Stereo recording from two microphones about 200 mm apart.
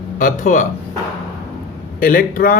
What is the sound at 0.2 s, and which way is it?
Speech, 40° left (ahead or behind).